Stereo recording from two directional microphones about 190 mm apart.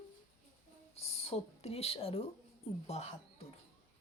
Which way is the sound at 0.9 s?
30° left (ahead or behind).